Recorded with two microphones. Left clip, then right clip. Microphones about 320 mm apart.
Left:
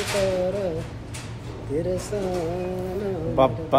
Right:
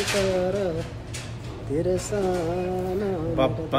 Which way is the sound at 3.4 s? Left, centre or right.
Centre.